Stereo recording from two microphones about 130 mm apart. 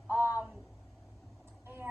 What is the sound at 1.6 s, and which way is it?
Vehicle, 15° right (ahead or behind).